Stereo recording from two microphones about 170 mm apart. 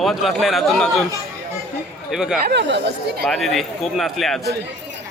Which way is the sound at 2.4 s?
90° right.